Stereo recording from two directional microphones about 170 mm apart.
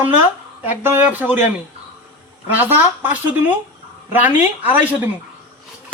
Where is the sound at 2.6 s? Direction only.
10° right (ahead or behind).